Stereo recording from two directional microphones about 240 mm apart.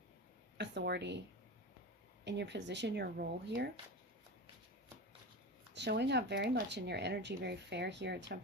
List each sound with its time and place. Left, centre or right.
0.5 s a woman's voice: right
2.2 s speech: right
5.7 s speech: right